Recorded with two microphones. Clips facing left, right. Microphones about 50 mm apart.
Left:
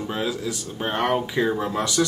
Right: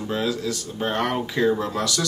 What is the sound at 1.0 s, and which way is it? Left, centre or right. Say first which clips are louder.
Speech: left 2 dB; centre.